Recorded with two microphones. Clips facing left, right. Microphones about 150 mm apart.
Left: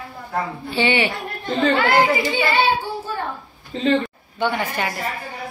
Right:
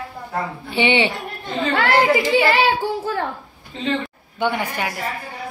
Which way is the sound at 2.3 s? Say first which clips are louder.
Right 2 dB; 90° right.